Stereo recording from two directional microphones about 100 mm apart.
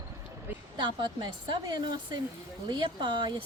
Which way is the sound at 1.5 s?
50° right (ahead or behind).